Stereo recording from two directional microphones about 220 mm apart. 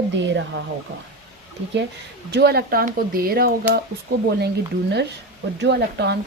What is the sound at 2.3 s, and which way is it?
Speech, 45° right (ahead or behind).